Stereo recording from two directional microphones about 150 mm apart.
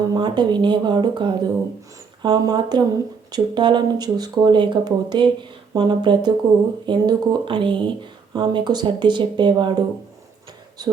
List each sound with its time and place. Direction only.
0.1 s speech: 30° right (ahead or behind)